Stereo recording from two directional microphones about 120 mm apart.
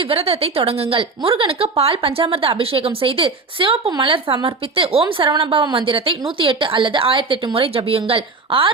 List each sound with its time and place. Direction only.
0.0 s speech: 50° right (ahead or behind)